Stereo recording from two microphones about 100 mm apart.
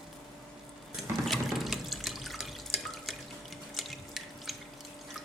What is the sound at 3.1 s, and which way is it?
Drip, centre (ahead or behind).